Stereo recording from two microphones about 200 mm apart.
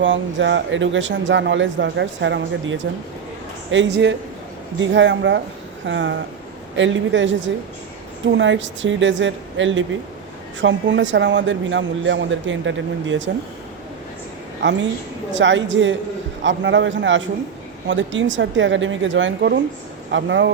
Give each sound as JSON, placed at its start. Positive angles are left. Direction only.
{"t": 0.0, "sound": "speech", "side_deg": -65}
{"t": 14.6, "sound": "a woman's voice", "side_deg": -65}